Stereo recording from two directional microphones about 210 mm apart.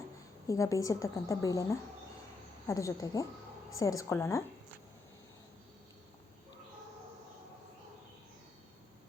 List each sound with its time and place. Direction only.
0.4 s a woman's voice: 15° left (ahead or behind)